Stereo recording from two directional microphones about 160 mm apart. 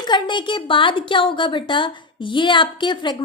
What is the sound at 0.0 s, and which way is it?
A woman's voice, 30° left (ahead or behind).